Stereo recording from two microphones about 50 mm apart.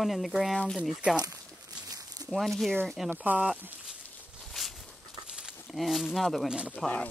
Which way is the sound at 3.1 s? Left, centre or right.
Right.